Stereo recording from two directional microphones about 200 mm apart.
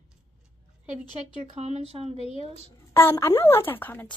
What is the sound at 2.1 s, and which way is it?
Speech, 25° left (ahead or behind).